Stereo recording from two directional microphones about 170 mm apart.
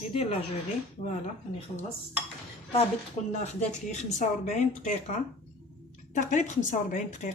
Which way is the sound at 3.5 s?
40° left (ahead or behind).